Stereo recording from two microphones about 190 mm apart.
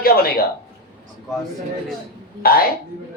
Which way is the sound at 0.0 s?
50° left (ahead or behind).